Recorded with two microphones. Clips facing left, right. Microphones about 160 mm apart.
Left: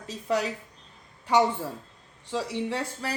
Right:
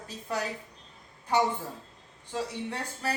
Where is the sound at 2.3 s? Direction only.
90° left.